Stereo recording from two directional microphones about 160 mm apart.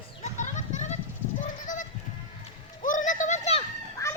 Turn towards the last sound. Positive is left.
turn(degrees=20)  # may be behind; listen again after turning